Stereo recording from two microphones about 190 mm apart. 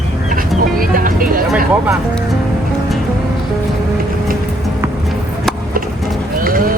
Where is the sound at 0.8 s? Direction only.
45° right (ahead or behind).